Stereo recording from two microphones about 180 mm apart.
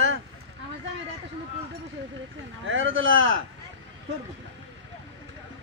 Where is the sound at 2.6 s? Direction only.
90° right.